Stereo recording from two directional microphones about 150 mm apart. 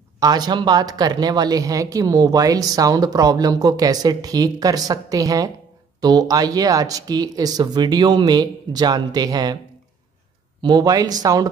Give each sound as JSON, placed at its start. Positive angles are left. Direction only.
{"t": 0.2, "sound": "speech", "side_deg": -25}
{"t": 10.6, "sound": "speech", "side_deg": -25}